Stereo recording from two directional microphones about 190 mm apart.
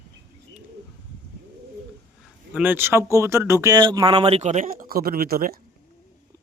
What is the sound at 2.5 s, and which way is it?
Speech, 10° right (ahead or behind).